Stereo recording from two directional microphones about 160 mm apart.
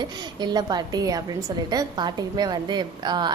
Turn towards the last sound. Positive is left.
turn(degrees=-25)  # may be behind; listen again after turning